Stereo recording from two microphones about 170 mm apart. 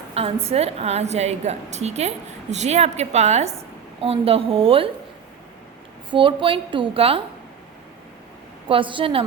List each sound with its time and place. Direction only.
0.1 s a woman's voice: 35° right (ahead or behind)
6.1 s a woman's voice: 30° right (ahead or behind)
8.6 s a woman's voice: 30° right (ahead or behind)